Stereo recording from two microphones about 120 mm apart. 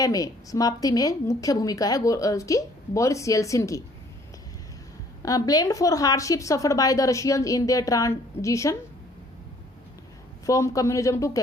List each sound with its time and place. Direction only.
0.0 s a woman's voice: 30° left (ahead or behind)
5.2 s a woman's voice: 30° left (ahead or behind)
10.4 s a woman's voice: 25° left (ahead or behind)